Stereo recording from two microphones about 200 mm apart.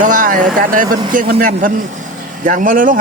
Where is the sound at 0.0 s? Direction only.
40° right (ahead or behind).